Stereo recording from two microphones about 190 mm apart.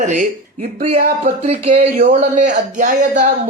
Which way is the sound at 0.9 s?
50° right (ahead or behind).